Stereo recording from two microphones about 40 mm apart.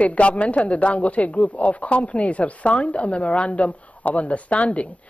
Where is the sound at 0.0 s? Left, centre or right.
Left.